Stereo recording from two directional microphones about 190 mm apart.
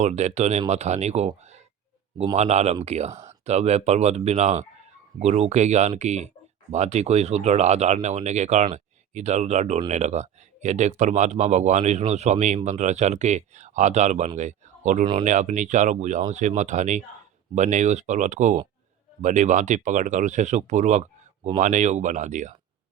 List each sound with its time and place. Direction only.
0.0 s speech: 35° right (ahead or behind)